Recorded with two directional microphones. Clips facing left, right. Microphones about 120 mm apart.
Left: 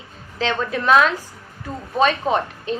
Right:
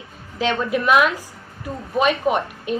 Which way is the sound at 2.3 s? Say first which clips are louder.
Even; 30° left (ahead or behind).